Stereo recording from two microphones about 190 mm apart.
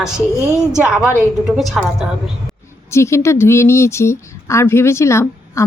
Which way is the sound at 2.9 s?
15° left (ahead or behind).